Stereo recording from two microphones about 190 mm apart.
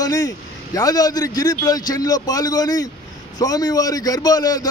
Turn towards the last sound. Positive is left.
turn(degrees=20)  # may be behind; listen again after turning